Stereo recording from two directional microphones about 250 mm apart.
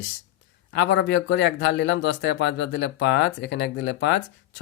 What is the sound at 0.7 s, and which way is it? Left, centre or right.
A man's voice, left.